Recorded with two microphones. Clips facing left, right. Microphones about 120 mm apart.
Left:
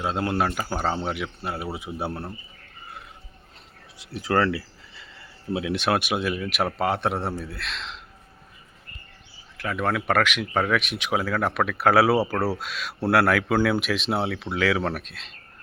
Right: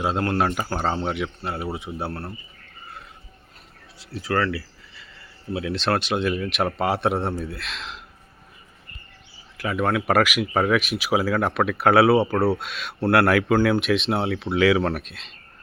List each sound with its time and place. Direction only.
0.2 s speech: 5° left (ahead or behind)
3.9 s a sound: 20° left (ahead or behind)
5.5 s speech: 15° left (ahead or behind); by 8.0 s centre (ahead or behind)
9.6 s speech: 5° right (ahead or behind)